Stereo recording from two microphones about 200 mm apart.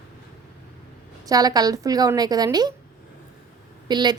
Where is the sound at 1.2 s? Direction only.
20° right (ahead or behind).